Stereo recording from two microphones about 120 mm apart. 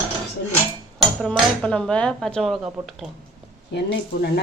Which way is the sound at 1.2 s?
5° left (ahead or behind).